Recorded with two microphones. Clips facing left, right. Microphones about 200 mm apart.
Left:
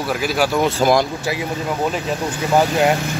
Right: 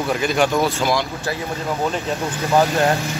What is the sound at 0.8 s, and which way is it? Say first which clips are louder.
Speech: left 5 dB; 45° left (ahead or behind).